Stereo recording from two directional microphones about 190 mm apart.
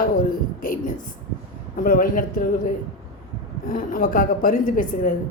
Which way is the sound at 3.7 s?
45° left (ahead or behind).